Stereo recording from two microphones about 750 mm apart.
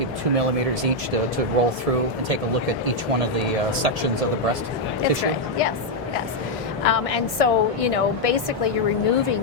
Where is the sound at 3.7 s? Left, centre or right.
Right.